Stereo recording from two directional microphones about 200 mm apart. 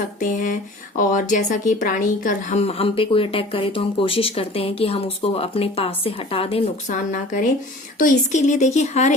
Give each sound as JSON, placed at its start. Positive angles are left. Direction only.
{"t": 0.2, "sound": "a woman's voice", "side_deg": 40}
{"t": 7.1, "sound": "speech", "side_deg": 40}